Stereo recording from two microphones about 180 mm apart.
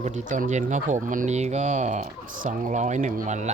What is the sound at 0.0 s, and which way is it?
Speech, 40° right (ahead or behind).